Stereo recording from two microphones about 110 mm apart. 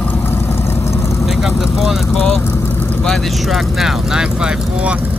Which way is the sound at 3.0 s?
5° left (ahead or behind).